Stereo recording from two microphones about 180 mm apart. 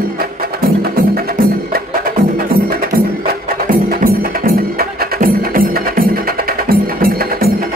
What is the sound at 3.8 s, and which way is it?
Music, 55° right (ahead or behind).